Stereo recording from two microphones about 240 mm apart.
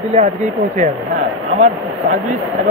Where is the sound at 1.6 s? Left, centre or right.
Right.